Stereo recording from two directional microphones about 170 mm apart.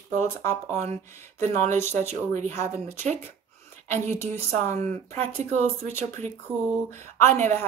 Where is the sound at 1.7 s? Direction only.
15° left (ahead or behind).